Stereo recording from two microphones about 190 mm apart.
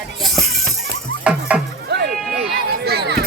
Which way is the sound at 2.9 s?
60° right (ahead or behind).